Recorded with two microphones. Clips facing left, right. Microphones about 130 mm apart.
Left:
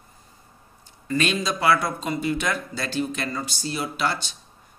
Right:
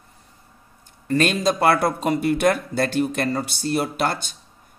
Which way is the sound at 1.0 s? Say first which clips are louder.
Right 5 dB; 50° right (ahead or behind).